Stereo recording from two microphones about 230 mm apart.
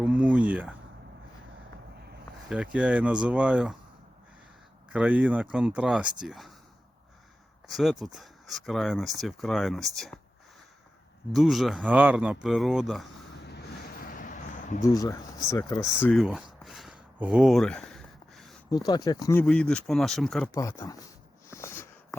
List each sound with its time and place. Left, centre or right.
0.0 s a sound: centre
2.5 s speech: centre
4.9 s speech: centre
7.7 s speech: centre
11.3 s speech: centre
14.1 s a sound: left
14.8 s speech: centre
18.7 s speech: centre
20.5 s speech: centre
21.5 s a sound: centre